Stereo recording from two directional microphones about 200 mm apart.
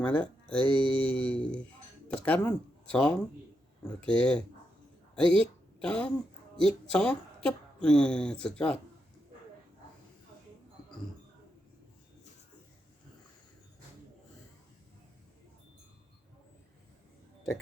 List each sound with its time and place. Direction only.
0.0 s speech: 5° left (ahead or behind)
0.7 s mantra: 25° right (ahead or behind)
1.0 s speech: 5° left (ahead or behind)